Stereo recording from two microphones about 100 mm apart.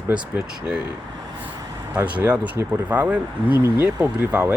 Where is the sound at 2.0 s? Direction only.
15° right (ahead or behind).